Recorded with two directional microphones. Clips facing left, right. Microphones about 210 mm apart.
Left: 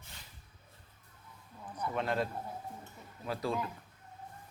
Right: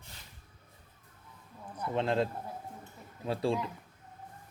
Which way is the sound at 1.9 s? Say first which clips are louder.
Right 4 dB; 25° right (ahead or behind).